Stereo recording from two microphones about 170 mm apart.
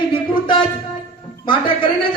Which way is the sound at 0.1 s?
30° left (ahead or behind).